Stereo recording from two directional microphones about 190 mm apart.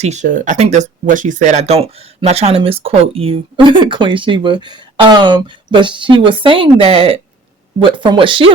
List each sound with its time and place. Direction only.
0.0 s speech: 40° right (ahead or behind)